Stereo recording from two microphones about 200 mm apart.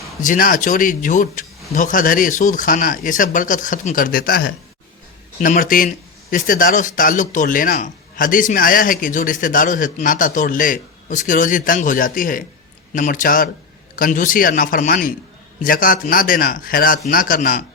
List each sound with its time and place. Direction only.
0.2 s speech: 40° left (ahead or behind)